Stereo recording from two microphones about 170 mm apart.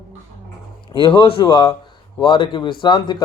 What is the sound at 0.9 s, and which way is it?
A man's voice, 30° left (ahead or behind).